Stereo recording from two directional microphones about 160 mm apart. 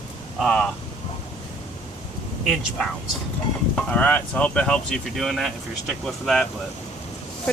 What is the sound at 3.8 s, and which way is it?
Speech, 10° left (ahead or behind).